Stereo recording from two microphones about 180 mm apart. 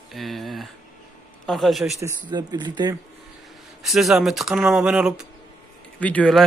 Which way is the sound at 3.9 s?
Centre (ahead or behind).